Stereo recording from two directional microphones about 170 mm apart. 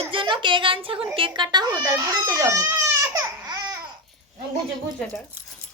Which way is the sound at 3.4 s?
20° right (ahead or behind).